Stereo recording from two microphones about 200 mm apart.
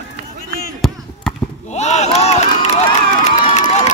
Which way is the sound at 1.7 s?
35° left (ahead or behind).